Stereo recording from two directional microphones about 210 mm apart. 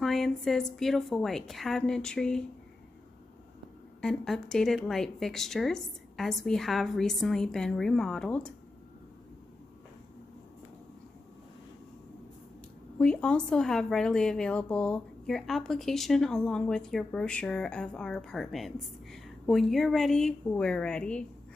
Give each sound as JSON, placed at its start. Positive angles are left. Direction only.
{"t": 0.0, "sound": "speech", "side_deg": 0}
{"t": 4.0, "sound": "speech", "side_deg": 0}
{"t": 13.0, "sound": "speech", "side_deg": 5}